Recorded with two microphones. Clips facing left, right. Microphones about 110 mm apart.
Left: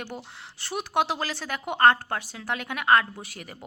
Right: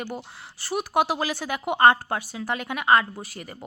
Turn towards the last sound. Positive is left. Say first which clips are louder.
# right 3 dB
turn(degrees=0)  # may be behind; listen again after turning